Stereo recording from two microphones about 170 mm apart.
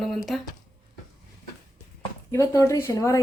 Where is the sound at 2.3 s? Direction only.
20° left (ahead or behind).